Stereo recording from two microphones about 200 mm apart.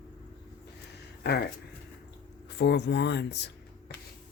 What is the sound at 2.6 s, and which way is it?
Speech, 60° left (ahead or behind).